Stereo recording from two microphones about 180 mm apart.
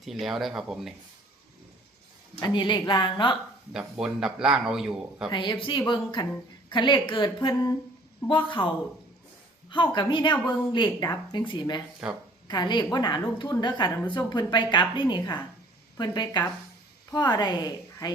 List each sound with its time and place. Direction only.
0.0 s a man's voice: centre (ahead or behind)
2.4 s a woman's voice: 25° left (ahead or behind)
3.7 s a man's voice: 5° right (ahead or behind)
5.3 s a woman's voice: 25° left (ahead or behind)
12.0 s a man's voice: 5° right (ahead or behind)
12.5 s a woman's voice: 25° left (ahead or behind)